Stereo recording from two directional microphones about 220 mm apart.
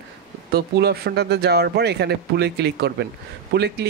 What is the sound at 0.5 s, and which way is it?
Speech, 45° right (ahead or behind).